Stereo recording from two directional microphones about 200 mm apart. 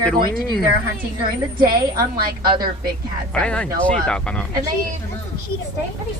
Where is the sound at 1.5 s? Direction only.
50° right (ahead or behind).